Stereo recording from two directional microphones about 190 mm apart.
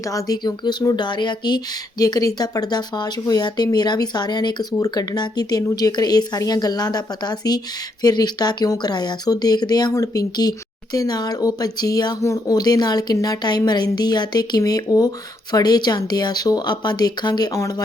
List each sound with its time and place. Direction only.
0.0 s speech: 15° left (ahead or behind)